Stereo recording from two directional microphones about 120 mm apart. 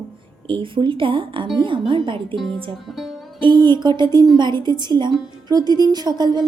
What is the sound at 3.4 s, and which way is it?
Speech, 40° right (ahead or behind).